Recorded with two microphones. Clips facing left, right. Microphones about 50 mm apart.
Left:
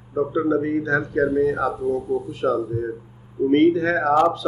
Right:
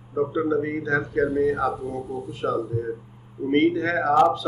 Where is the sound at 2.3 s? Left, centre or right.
Left.